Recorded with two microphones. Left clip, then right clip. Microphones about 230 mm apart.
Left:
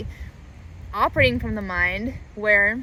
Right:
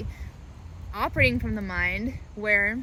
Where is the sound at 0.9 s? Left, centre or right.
Centre.